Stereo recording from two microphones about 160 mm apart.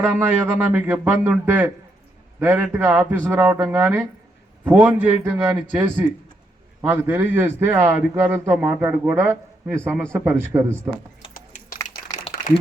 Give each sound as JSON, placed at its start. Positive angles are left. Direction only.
{"t": 0.0, "sound": "a man's voice", "side_deg": -10}
{"t": 11.3, "sound": "typing", "side_deg": 60}